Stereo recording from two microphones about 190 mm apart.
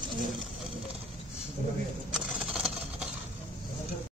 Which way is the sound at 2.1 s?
5° right (ahead or behind).